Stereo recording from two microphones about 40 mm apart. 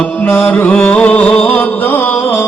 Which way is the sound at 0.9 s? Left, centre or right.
Left.